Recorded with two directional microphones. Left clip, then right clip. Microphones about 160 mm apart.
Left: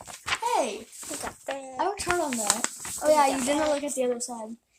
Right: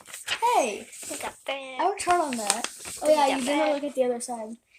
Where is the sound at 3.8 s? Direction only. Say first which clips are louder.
Right 2 dB; 15° left (ahead or behind).